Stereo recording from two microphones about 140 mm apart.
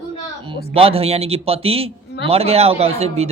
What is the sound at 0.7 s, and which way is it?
A man's voice, 45° right (ahead or behind).